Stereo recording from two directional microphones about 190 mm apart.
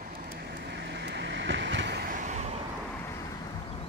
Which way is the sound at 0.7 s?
65° right (ahead or behind).